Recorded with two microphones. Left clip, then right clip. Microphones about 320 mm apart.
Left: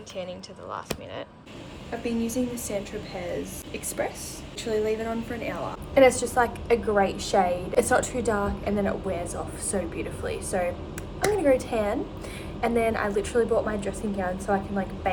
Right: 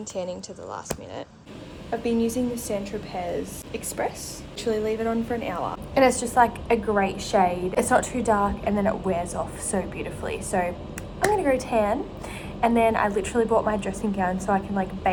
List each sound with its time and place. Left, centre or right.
0.3 s a woman's voice: centre